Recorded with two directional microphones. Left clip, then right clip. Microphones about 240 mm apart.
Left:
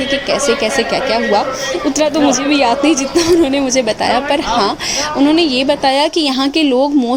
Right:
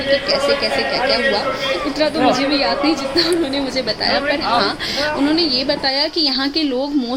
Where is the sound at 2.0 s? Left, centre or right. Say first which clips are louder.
Left 2 dB; left.